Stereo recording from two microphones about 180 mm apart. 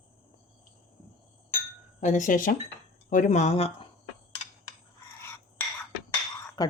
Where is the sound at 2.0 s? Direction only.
45° left (ahead or behind).